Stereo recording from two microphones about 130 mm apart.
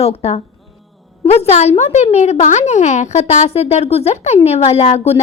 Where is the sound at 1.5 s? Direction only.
55° left (ahead or behind).